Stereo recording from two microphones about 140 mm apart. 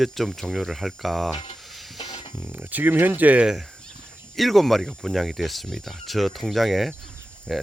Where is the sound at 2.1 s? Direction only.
45° left (ahead or behind).